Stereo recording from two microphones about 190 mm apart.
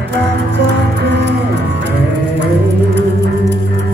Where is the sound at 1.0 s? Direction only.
65° right (ahead or behind).